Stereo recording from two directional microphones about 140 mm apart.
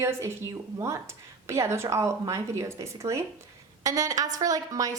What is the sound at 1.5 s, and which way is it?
A woman's voice, 20° right (ahead or behind).